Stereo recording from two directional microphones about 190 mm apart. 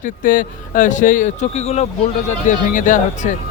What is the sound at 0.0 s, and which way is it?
Speech, 45° left (ahead or behind).